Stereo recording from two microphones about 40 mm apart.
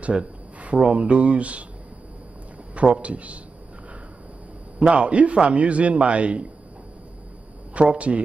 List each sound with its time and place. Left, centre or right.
0.0 s a sound: right
0.9 s a man's voice: right
2.7 s a man's voice: right
4.7 s a man's voice: right
7.7 s a man's voice: right